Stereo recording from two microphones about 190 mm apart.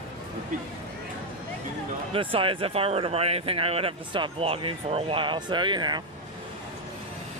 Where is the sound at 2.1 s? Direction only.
30° right (ahead or behind).